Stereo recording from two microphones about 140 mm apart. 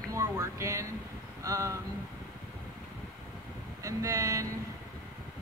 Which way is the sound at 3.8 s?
25° right (ahead or behind).